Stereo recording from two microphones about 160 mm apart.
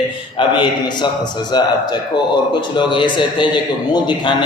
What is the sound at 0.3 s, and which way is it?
Speech, 30° left (ahead or behind).